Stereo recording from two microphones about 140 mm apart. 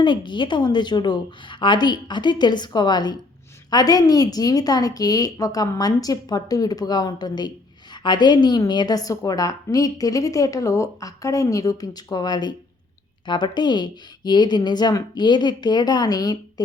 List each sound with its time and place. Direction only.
0.0 s a woman's voice: 35° left (ahead or behind)